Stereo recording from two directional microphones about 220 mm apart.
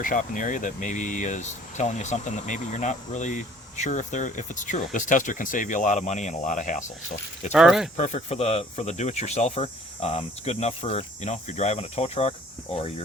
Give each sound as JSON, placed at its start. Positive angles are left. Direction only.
{"t": 0.0, "sound": "speech", "side_deg": 35}
{"t": 7.5, "sound": "speech", "side_deg": 0}
{"t": 7.9, "sound": "speech", "side_deg": 30}